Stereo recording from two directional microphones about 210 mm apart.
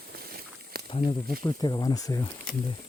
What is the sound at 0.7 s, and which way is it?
Walk, 50° right (ahead or behind).